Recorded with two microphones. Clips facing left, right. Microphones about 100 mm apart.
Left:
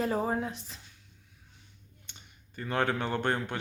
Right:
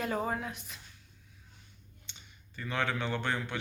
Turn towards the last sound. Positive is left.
turn(degrees=45)  # may be behind; listen again after turning